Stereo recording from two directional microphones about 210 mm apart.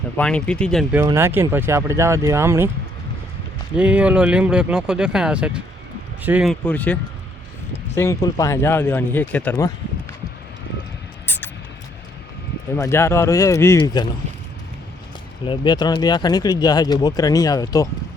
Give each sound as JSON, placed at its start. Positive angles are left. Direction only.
{"t": 0.2, "sound": "speech", "side_deg": 5}
{"t": 0.9, "sound": "speech", "side_deg": -10}
{"t": 3.8, "sound": "speech", "side_deg": -5}
{"t": 6.7, "sound": "speech", "side_deg": 10}
{"t": 11.3, "sound": "rodents", "side_deg": 10}
{"t": 12.7, "sound": "speech", "side_deg": 10}
{"t": 15.4, "sound": "speech", "side_deg": 20}